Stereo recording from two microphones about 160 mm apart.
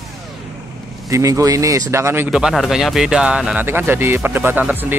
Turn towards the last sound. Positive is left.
turn(degrees=-10)  # may be behind; listen again after turning